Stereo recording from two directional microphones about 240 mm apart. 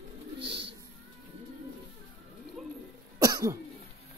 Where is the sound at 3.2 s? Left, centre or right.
Centre.